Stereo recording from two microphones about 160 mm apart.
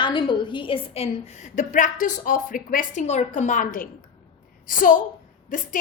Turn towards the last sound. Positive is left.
turn(degrees=55)  # may be behind; listen again after turning